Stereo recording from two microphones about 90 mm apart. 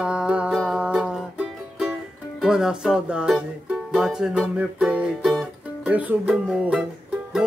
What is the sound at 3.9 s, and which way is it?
Music, 5° right (ahead or behind).